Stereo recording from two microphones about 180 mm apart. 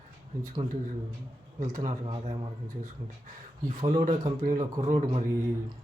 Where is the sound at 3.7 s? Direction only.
40° right (ahead or behind).